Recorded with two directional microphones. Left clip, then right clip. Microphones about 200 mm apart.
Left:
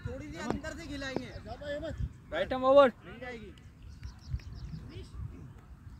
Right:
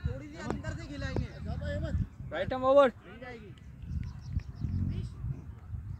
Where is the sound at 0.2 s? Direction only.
55° left (ahead or behind).